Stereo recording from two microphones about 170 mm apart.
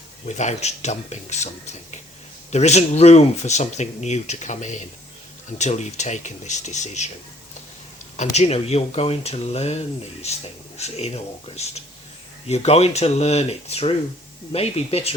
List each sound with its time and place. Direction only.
0.3 s speech: 45° left (ahead or behind)
8.1 s speech: 40° left (ahead or behind)